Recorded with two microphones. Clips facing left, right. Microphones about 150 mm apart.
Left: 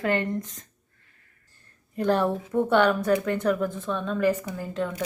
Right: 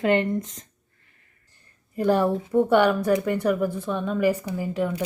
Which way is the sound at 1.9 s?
10° right (ahead or behind).